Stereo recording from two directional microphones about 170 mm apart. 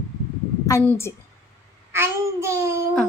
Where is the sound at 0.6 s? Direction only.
15° left (ahead or behind).